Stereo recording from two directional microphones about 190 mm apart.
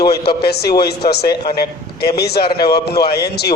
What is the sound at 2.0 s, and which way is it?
A man's voice, 60° left (ahead or behind).